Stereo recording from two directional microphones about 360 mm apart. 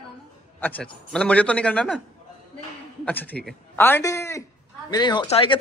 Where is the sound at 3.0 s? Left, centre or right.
Centre.